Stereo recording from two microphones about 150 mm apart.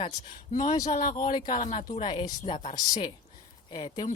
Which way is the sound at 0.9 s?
50° left (ahead or behind).